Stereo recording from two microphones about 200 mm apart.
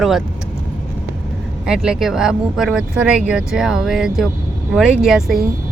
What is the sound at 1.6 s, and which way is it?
Speech, 5° right (ahead or behind).